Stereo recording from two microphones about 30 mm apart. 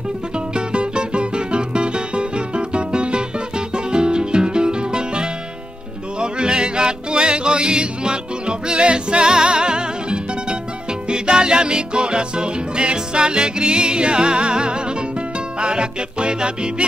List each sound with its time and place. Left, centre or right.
0.6 s music: right